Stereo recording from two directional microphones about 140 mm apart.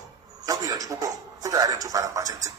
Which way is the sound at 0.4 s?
25° right (ahead or behind).